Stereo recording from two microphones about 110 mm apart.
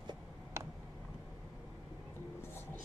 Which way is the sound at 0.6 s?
25° right (ahead or behind).